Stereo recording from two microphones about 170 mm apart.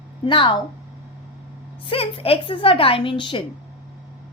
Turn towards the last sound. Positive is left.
turn(degrees=30)  # may be behind; listen again after turning